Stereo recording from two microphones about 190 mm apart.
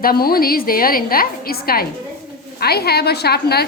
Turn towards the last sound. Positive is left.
turn(degrees=55)  # may be behind; listen again after turning